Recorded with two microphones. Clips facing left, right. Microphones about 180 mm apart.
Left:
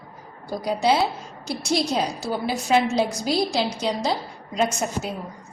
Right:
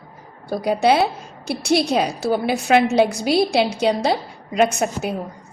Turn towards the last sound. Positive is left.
turn(degrees=-65)  # may be behind; listen again after turning